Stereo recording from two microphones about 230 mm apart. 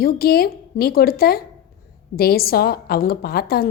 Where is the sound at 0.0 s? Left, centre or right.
Left.